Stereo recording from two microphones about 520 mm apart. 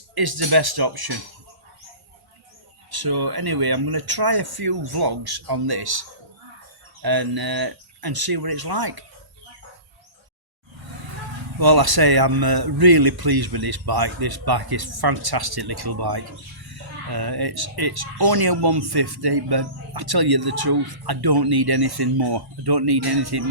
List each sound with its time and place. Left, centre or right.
0.1 s speech: right
2.9 s speech: right
11.6 s speech: right